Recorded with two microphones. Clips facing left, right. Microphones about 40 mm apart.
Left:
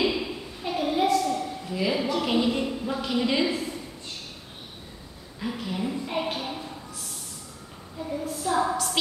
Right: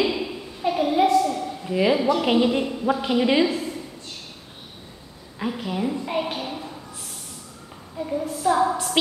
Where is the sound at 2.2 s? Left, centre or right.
Right.